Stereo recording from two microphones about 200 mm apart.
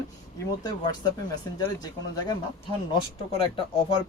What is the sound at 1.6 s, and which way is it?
Speech, 20° left (ahead or behind).